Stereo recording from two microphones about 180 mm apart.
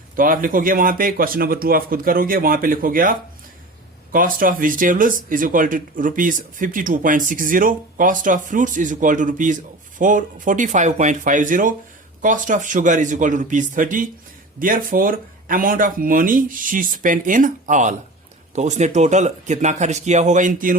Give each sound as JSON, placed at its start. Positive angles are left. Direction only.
{"t": 0.2, "sound": "speech", "side_deg": -50}